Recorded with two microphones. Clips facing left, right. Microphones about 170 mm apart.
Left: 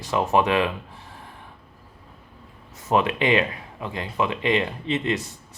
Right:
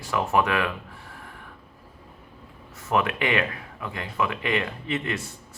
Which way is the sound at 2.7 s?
20° left (ahead or behind).